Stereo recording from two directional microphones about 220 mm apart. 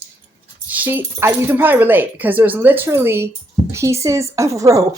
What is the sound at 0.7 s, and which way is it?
Speech, 10° right (ahead or behind).